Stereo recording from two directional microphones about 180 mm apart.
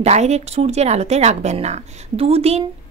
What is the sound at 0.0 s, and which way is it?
A woman's voice, 40° right (ahead or behind).